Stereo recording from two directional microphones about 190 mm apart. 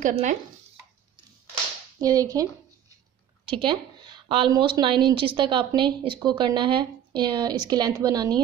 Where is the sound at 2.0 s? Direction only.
20° right (ahead or behind).